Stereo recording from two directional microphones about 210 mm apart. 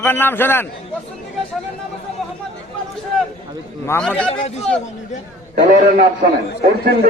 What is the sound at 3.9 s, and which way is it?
Speech, 5° left (ahead or behind).